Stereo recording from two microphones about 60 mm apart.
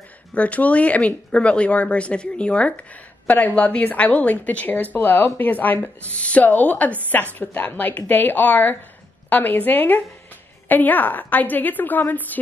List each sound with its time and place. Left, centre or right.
0.3 s a woman's voice: left